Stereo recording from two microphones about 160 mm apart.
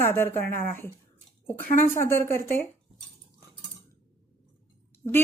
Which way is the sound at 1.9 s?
15° left (ahead or behind).